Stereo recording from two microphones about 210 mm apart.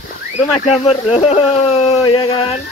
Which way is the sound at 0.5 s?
30° left (ahead or behind).